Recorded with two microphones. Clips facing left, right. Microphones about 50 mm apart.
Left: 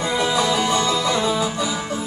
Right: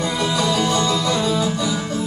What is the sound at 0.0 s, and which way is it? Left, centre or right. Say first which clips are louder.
Music: left 1 dB; centre.